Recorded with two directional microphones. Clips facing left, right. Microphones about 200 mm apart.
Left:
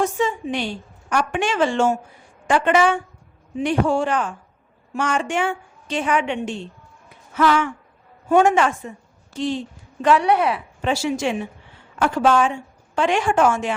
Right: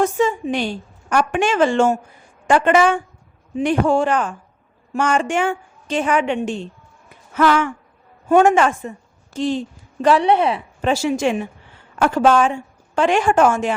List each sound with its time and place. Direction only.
0.0 s a woman's voice: 45° right (ahead or behind)
10.0 s speech: 35° right (ahead or behind)
10.8 s a woman's voice: 45° right (ahead or behind)